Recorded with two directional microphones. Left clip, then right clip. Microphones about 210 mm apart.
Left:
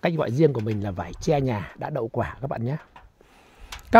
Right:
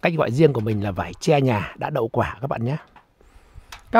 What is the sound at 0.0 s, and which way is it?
Speech, 5° right (ahead or behind).